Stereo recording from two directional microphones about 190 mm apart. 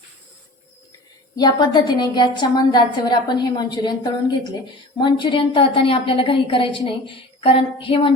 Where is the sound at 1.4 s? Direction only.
20° left (ahead or behind).